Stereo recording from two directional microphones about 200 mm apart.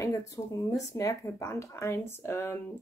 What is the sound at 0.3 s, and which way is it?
Speech, 15° left (ahead or behind).